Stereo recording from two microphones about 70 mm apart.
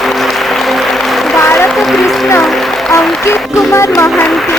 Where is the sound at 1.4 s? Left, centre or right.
Left.